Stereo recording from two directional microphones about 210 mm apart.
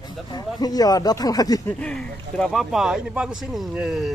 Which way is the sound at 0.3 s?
20° left (ahead or behind).